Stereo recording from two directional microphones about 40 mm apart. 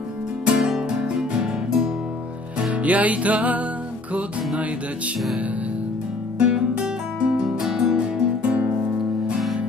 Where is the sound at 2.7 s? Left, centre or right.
Right.